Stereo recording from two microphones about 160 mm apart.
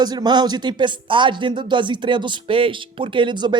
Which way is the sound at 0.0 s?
25° right (ahead or behind).